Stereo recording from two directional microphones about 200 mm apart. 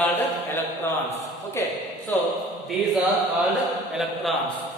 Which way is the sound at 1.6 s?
15° left (ahead or behind).